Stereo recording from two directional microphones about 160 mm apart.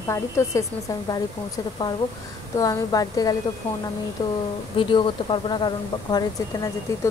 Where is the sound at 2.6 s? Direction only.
20° left (ahead or behind).